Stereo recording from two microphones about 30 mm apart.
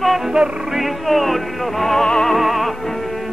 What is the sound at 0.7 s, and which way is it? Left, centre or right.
Music, centre.